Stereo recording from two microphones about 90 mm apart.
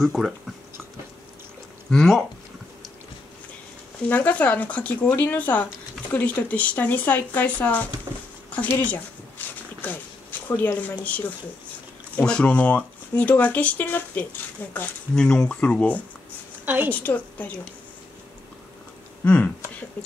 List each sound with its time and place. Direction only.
0.0 s speech: 5° right (ahead or behind)
1.9 s speech: 5° left (ahead or behind)
4.1 s speech: 20° left (ahead or behind)
15.1 s speech: 10° left (ahead or behind)
16.6 s a woman's voice: 20° right (ahead or behind)
16.9 s speech: 20° left (ahead or behind)
19.2 s speech: 15° left (ahead or behind)